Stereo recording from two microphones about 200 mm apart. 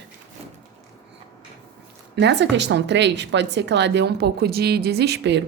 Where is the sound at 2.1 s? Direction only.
60° right (ahead or behind).